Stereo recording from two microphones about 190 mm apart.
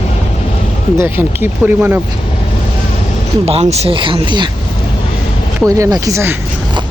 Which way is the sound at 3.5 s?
35° right (ahead or behind).